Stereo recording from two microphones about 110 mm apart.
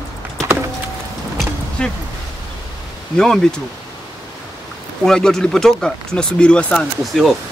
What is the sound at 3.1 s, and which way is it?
Speech, 5° left (ahead or behind).